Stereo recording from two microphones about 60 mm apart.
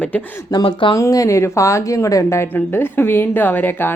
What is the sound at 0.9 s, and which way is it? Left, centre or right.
Speech, left.